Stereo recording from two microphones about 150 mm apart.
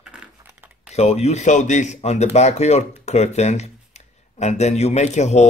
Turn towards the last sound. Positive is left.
turn(degrees=50)  # may be behind; listen again after turning